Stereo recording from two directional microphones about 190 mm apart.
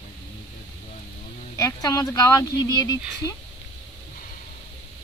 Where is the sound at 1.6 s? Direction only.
15° left (ahead or behind).